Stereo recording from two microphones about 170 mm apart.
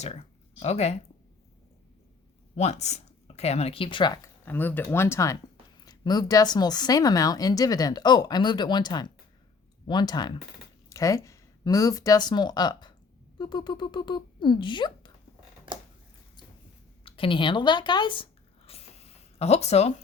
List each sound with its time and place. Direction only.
0.0 s speech: 40° left (ahead or behind)
2.6 s speech: 40° left (ahead or behind); by 4.3 s 25° left (ahead or behind)
4.4 s speech: 10° left (ahead or behind); by 15.1 s 25° left (ahead or behind)
17.0 s writing: 30° left (ahead or behind)